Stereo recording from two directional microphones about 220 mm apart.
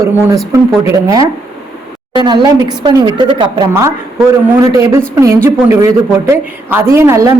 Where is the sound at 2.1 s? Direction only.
20° right (ahead or behind).